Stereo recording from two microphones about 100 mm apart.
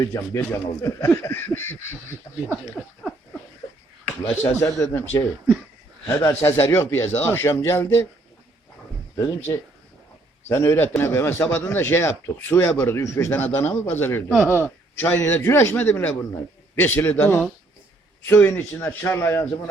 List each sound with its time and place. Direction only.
0.0 s speech: 30° left (ahead or behind)
4.0 s speech: 20° left (ahead or behind)
10.5 s speech: 25° left (ahead or behind)
14.3 s speech: 5° left (ahead or behind)
14.5 s speech: 20° left (ahead or behind)